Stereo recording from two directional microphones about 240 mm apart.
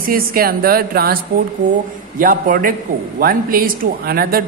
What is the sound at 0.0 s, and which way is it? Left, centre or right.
A man's voice, right.